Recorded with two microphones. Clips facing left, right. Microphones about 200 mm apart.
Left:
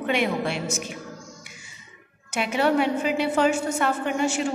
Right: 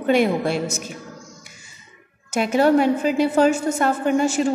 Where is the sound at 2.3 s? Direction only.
40° right (ahead or behind).